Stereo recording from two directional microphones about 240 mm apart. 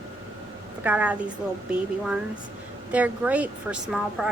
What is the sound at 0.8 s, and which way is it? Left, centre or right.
Speech, centre.